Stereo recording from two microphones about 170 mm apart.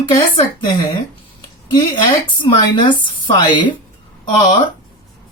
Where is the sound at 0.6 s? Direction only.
30° left (ahead or behind).